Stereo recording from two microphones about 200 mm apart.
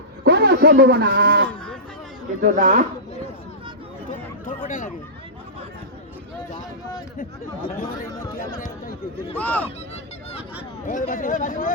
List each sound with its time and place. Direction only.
0.3 s a man's voice: 55° right (ahead or behind)
2.4 s speech: 40° right (ahead or behind)
4.1 s a sound: 40° left (ahead or behind)
7.2 s speech: 45° left (ahead or behind)
8.0 s speech: 15° left (ahead or behind)
8.4 s chatter: 45° left (ahead or behind)
9.4 s speech: 10° left (ahead or behind)
10.8 s speech: 45° left (ahead or behind)